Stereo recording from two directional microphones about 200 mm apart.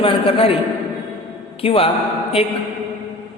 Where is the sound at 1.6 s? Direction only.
30° left (ahead or behind).